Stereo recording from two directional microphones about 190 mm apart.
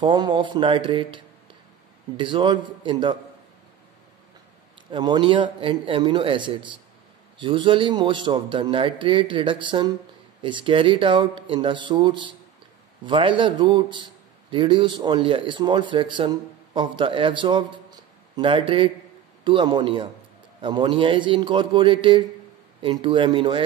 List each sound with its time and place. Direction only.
0.0 s speech: 25° right (ahead or behind)
4.9 s speech: 25° right (ahead or behind)